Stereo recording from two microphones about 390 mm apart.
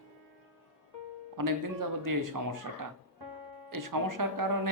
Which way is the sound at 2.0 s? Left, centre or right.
Right.